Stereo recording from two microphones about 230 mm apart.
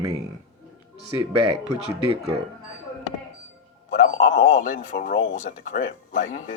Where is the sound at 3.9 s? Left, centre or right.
Left.